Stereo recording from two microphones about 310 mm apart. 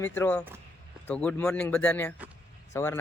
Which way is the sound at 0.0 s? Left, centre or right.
Centre.